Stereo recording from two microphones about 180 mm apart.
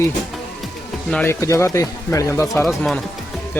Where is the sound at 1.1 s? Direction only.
15° left (ahead or behind).